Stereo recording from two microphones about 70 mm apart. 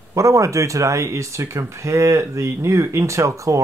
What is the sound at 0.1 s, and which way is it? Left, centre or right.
Speech, right.